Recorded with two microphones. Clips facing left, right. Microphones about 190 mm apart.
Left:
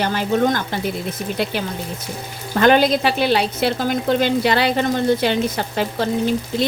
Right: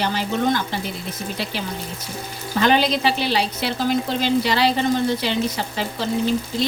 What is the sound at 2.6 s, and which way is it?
Speech, 50° left (ahead or behind).